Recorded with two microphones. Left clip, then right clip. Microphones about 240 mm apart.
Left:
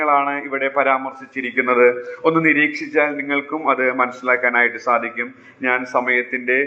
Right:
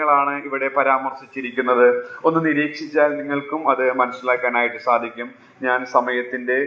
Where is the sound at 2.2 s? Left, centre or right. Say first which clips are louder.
Left 5 dB; left.